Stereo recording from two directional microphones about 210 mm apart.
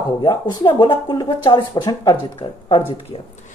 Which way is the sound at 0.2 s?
20° left (ahead or behind).